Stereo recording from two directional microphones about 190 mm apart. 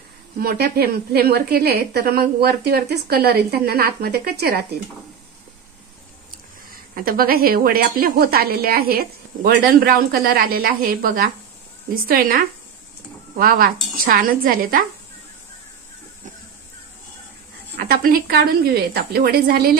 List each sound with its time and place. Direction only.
0.4 s a woman's voice: 55° right (ahead or behind)
6.7 s speech: 50° right (ahead or behind)
17.7 s speech: 50° right (ahead or behind)